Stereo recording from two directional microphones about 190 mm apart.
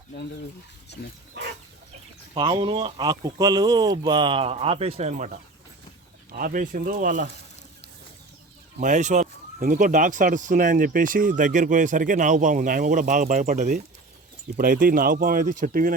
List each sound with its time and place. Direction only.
2.3 s speech: 25° right (ahead or behind)
6.3 s speech: 45° right (ahead or behind)
8.8 s speech: 40° right (ahead or behind)